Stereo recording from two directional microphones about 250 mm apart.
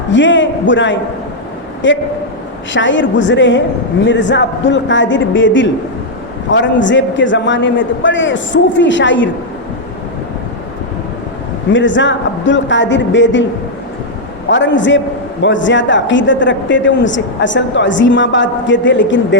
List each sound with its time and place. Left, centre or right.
0.1 s a man's voice: left
11.7 s a man's voice: left
14.5 s a man's voice: left